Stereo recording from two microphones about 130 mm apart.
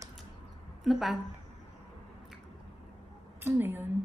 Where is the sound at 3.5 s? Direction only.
15° right (ahead or behind).